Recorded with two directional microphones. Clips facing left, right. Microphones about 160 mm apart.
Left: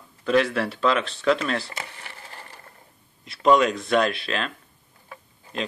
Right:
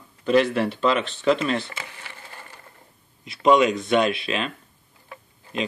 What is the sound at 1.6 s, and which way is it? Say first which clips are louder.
Speech: left 1 dB; 35° left (ahead or behind).